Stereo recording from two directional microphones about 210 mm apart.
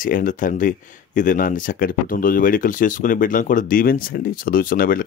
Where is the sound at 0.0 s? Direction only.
40° left (ahead or behind).